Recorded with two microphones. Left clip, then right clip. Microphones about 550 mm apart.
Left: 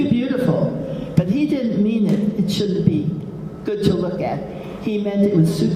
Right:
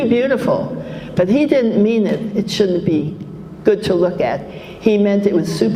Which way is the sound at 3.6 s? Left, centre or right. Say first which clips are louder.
Right 7 dB; right.